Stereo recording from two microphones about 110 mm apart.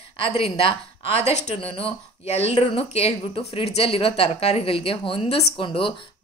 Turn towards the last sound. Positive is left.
turn(degrees=50)  # may be behind; listen again after turning